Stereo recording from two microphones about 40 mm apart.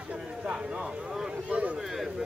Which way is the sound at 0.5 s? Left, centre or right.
Right.